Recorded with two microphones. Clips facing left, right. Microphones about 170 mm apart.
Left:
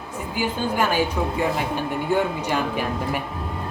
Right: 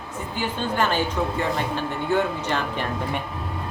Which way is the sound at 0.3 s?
10° left (ahead or behind).